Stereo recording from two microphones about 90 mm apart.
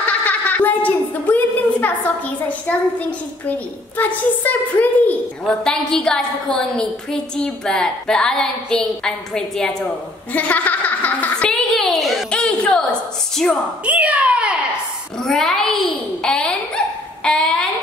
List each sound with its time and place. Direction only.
0.0 s a woman's voice: 15° left (ahead or behind)
10.3 s music: 15° left (ahead or behind); by 12.3 s centre (ahead or behind)
12.3 s a sound: 10° left (ahead or behind)
13.8 s a child's voice: 15° right (ahead or behind)
15.1 s a woman's voice: 5° left (ahead or behind)